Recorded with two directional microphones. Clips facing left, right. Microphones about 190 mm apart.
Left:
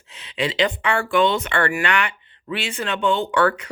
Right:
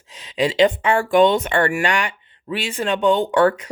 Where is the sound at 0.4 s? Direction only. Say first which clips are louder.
Right 5 dB; 45° right (ahead or behind).